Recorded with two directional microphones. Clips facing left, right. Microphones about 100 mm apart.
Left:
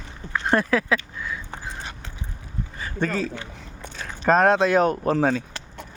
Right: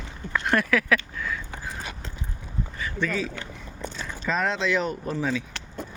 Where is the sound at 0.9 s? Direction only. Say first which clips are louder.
Even; 20° left (ahead or behind).